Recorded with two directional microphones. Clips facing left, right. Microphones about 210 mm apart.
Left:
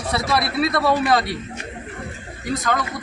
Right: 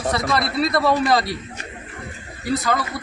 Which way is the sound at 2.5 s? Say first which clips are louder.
Right 1 dB; centre (ahead or behind).